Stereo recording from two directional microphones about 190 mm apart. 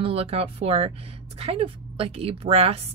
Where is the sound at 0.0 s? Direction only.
30° right (ahead or behind).